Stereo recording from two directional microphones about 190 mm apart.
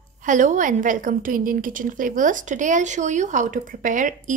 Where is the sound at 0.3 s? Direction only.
40° right (ahead or behind).